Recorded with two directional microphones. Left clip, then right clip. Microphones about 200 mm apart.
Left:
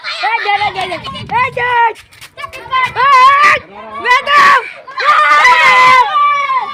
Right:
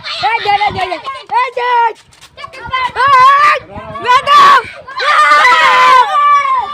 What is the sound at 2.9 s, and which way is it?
Speech, centre (ahead or behind).